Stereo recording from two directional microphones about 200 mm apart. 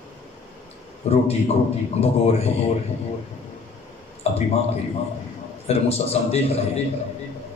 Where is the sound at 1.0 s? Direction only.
30° left (ahead or behind).